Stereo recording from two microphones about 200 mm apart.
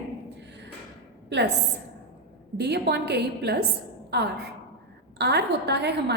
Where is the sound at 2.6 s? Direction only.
55° right (ahead or behind).